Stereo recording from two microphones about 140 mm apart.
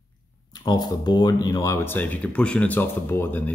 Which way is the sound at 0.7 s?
30° left (ahead or behind).